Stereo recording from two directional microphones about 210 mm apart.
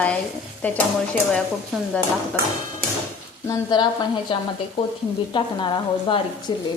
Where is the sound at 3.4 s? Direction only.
20° left (ahead or behind).